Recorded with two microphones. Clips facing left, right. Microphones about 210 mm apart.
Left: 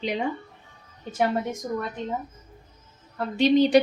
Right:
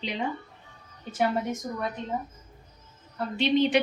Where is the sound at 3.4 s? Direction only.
40° left (ahead or behind).